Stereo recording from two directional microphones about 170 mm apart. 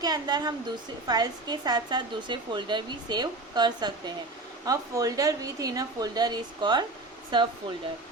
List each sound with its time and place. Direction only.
0.0 s a woman's voice: 25° right (ahead or behind)